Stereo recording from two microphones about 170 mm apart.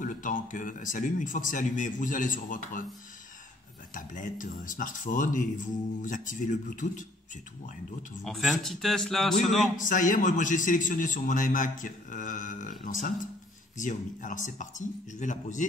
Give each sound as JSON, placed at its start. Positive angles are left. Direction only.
{"t": 0.0, "sound": "a man's voice", "side_deg": 50}
{"t": 3.9, "sound": "a man's voice", "side_deg": 50}
{"t": 8.2, "sound": "a man's voice", "side_deg": 0}
{"t": 9.8, "sound": "a man's voice", "side_deg": 50}